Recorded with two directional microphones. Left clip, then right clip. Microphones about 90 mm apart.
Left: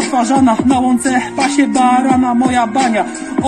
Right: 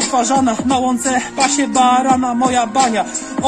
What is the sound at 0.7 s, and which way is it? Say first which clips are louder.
Music: left 2 dB; 30° right (ahead or behind).